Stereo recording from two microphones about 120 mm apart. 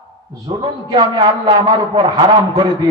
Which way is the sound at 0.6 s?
35° right (ahead or behind).